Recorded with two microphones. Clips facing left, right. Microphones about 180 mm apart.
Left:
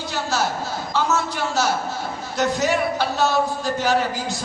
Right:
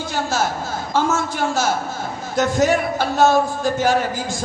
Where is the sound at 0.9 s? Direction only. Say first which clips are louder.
Right 3 dB; 50° right (ahead or behind).